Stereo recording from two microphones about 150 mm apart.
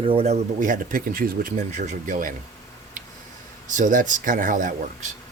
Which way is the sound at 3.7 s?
60° right (ahead or behind).